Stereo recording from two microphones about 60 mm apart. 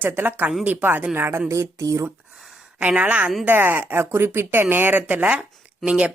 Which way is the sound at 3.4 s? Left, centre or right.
Right.